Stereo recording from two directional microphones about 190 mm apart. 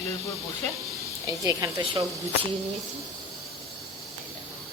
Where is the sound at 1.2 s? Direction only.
15° right (ahead or behind).